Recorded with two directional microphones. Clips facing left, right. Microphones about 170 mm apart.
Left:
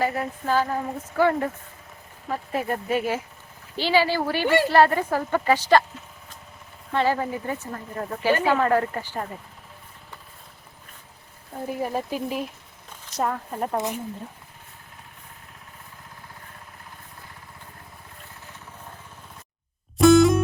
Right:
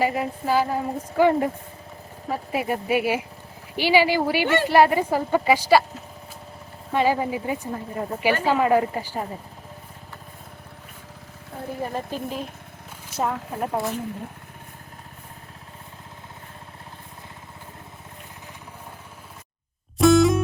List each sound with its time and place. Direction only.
0.0 s speech: 10° right (ahead or behind)
6.9 s speech: 15° right (ahead or behind)
11.8 s speech: 10° left (ahead or behind)
13.1 s speech: 5° right (ahead or behind)
13.7 s speech: 20° left (ahead or behind)
20.0 s music: centre (ahead or behind)